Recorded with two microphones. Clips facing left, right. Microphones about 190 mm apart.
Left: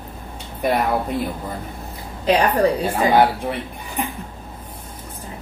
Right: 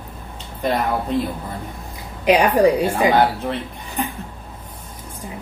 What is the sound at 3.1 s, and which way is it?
Speech, 10° left (ahead or behind).